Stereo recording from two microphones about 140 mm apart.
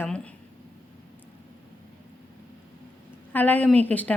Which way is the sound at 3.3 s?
10° left (ahead or behind).